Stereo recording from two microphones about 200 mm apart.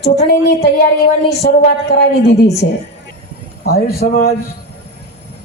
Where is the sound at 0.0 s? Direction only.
55° left (ahead or behind).